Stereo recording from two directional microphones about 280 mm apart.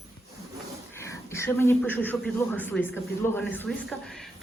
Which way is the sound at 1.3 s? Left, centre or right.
Centre.